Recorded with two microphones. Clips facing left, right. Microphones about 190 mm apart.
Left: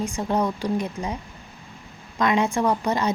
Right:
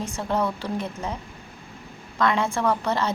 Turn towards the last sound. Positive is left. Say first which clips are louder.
# left 1 dB
turn(degrees=15)  # may be behind; listen again after turning